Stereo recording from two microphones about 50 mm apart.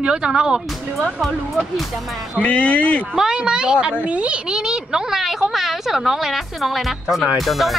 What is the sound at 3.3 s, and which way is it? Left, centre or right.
Speech, centre.